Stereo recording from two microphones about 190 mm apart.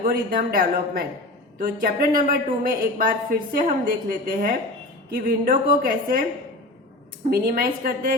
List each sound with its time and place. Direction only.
0.0 s a woman's voice: 50° right (ahead or behind)
7.3 s a woman's voice: 50° right (ahead or behind)